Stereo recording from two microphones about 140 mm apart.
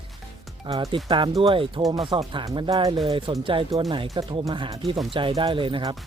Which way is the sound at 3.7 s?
25° right (ahead or behind).